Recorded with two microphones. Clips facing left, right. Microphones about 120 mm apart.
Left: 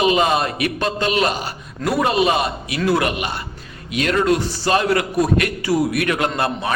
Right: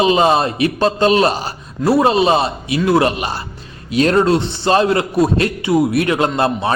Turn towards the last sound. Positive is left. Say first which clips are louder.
# right 5 dB
turn(degrees=-25)  # may be behind; listen again after turning